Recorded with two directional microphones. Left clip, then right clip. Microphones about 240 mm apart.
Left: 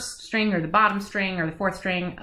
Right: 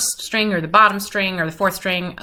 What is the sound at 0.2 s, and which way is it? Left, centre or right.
Speech, centre.